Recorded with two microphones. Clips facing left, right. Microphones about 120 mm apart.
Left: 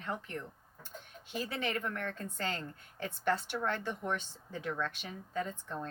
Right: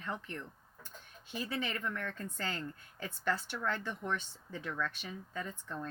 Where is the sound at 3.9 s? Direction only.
50° left (ahead or behind).